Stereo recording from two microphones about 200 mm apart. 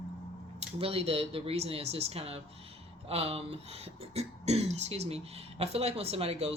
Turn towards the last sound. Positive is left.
turn(degrees=-30)  # may be behind; listen again after turning